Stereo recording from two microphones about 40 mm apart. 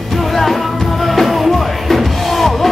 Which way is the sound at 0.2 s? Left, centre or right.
Centre.